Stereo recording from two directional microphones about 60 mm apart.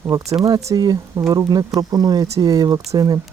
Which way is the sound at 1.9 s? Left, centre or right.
Right.